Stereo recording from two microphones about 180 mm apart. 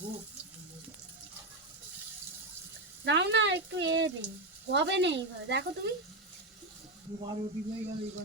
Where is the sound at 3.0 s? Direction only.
75° right (ahead or behind).